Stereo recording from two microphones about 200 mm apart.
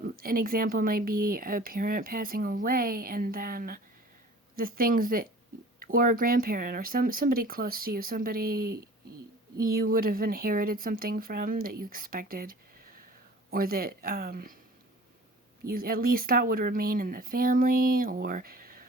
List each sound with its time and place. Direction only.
0.0 s speech: 45° right (ahead or behind)
15.7 s speech: 45° right (ahead or behind)